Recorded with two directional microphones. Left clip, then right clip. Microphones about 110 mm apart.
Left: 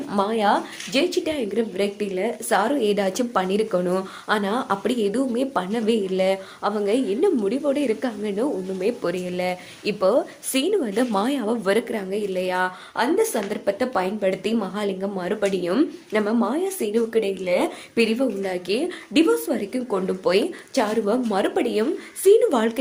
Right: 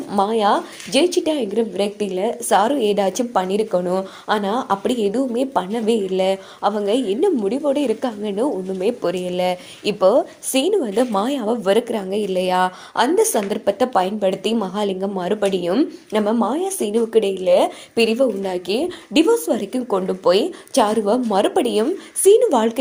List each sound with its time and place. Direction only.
0.2 s a woman's voice: 25° right (ahead or behind)
0.9 s a woman's voice: 35° right (ahead or behind); by 4.0 s 5° right (ahead or behind)
4.3 s a woman's voice: 25° right (ahead or behind); by 10.2 s 45° right (ahead or behind)
10.2 s a woman's voice: 25° right (ahead or behind)
11.9 s a woman's voice: 40° right (ahead or behind)
19.5 s a woman's voice: 45° right (ahead or behind)
20.1 s a woman's voice: 25° right (ahead or behind)
21.0 s a woman's voice: 40° right (ahead or behind)
22.2 s speech: 35° right (ahead or behind)
22.4 s a woman's voice: 25° right (ahead or behind)